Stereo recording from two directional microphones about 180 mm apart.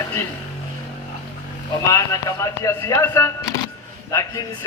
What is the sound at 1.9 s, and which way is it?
A man's voice, 15° left (ahead or behind).